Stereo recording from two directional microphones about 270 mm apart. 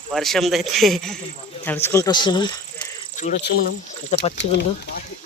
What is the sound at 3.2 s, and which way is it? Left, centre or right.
Speech, left.